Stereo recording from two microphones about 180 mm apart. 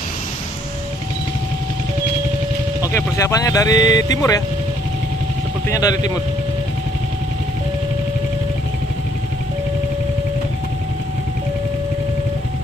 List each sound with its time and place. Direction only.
2.9 s speech: 15° left (ahead or behind)
5.7 s speech: 20° left (ahead or behind)